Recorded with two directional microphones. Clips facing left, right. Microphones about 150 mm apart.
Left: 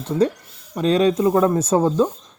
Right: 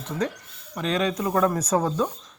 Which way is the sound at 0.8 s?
30° left (ahead or behind).